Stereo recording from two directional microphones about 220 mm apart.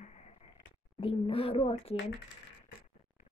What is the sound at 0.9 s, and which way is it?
Speech, 25° left (ahead or behind).